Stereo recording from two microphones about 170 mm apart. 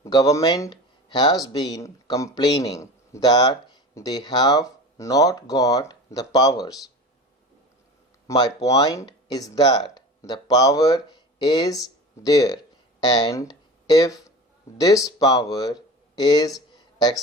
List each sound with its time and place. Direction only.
0.0 s speech: 20° left (ahead or behind)
8.3 s speech: 20° left (ahead or behind)
16.7 s a sound: 25° left (ahead or behind)